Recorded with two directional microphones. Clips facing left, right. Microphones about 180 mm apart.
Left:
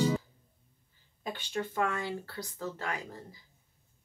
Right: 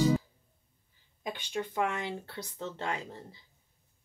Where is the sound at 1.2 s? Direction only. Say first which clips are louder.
Even; 15° right (ahead or behind).